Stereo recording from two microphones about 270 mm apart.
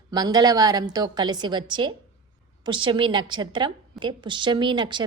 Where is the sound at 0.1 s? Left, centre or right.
Centre.